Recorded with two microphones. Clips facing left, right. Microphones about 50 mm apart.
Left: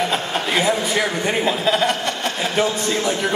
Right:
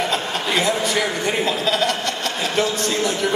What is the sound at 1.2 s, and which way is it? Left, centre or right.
A man's voice, centre.